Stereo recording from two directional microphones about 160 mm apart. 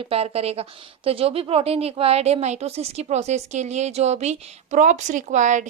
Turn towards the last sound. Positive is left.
turn(degrees=-50)  # may be behind; listen again after turning